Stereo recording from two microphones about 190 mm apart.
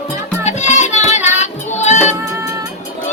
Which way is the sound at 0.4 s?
35° left (ahead or behind).